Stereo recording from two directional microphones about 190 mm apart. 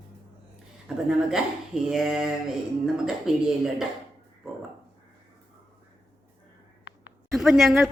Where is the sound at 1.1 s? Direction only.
5° right (ahead or behind).